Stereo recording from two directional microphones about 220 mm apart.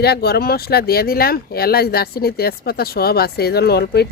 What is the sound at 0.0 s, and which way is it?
Speech, 45° left (ahead or behind).